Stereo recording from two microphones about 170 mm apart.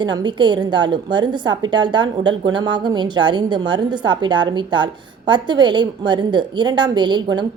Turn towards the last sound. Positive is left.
turn(degrees=-25)  # may be behind; listen again after turning